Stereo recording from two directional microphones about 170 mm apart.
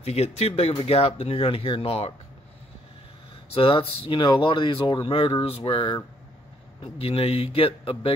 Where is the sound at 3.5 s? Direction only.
30° left (ahead or behind).